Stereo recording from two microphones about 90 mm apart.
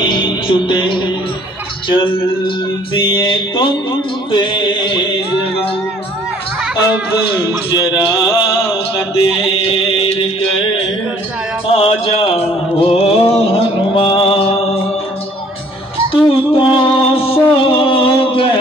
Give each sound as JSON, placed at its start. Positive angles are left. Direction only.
{"t": 0.0, "sound": "music", "side_deg": 65}
{"t": 1.9, "sound": "a sound", "side_deg": 70}
{"t": 7.4, "sound": "speech", "side_deg": 50}
{"t": 9.5, "sound": "music", "side_deg": 90}
{"t": 11.6, "sound": "a sound", "side_deg": 90}
{"t": 16.1, "sound": "music", "side_deg": 80}